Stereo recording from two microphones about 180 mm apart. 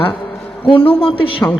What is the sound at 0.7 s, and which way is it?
Speech, 30° left (ahead or behind).